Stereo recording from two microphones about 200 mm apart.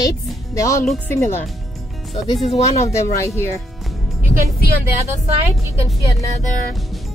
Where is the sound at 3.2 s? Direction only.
10° left (ahead or behind).